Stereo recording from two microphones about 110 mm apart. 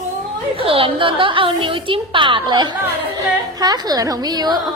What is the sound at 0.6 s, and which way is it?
A woman's voice, 55° right (ahead or behind).